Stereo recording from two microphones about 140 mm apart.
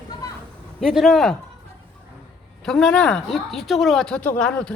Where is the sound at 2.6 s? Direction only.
5° left (ahead or behind).